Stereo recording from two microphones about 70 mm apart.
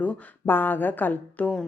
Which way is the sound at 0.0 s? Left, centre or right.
Left.